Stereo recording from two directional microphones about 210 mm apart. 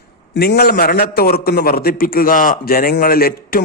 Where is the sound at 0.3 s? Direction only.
45° left (ahead or behind).